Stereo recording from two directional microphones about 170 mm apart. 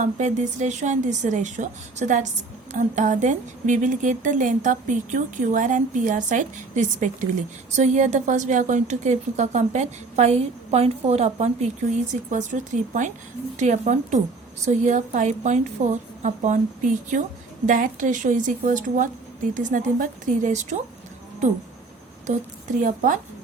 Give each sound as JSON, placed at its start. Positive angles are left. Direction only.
{"t": 0.0, "sound": "speech", "side_deg": -45}
{"t": 22.8, "sound": "speech", "side_deg": -50}